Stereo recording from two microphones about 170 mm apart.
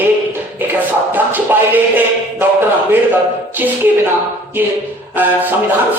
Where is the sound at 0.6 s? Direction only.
10° right (ahead or behind).